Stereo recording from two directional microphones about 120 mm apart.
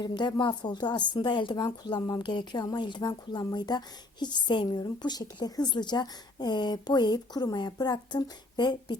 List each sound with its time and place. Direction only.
0.0 s a woman's voice: 35° left (ahead or behind)